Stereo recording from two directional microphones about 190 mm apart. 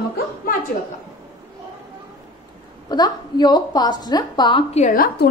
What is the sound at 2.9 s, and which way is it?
A woman's voice, 20° left (ahead or behind).